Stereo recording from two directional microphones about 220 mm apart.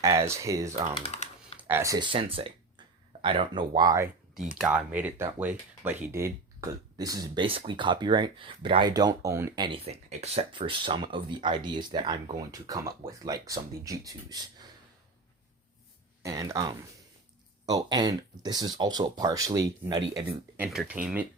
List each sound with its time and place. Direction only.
0.0 s speech: 15° right (ahead or behind)
1.0 s typing: 30° left (ahead or behind)
1.5 s speech: 10° right (ahead or behind)
4.5 s speech: centre (ahead or behind)
16.2 s speech: 15° right (ahead or behind)
20.7 s speech: 5° right (ahead or behind)